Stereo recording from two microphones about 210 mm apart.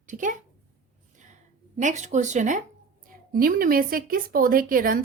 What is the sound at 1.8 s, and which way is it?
A woman's voice, 35° right (ahead or behind).